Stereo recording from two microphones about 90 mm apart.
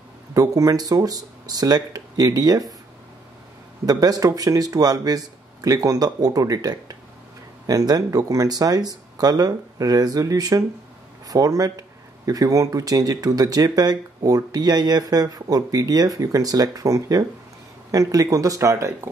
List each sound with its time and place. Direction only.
0.3 s speech: 40° right (ahead or behind)
3.8 s speech: 45° right (ahead or behind)